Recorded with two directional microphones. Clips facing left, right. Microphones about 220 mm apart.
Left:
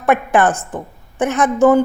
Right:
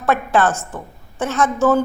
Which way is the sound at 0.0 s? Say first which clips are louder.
Left 3 dB; 15° left (ahead or behind).